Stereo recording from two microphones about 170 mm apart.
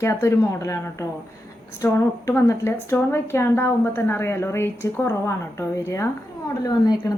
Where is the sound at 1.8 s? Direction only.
15° left (ahead or behind).